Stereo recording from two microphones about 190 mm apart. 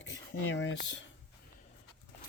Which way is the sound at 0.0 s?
70° left (ahead or behind).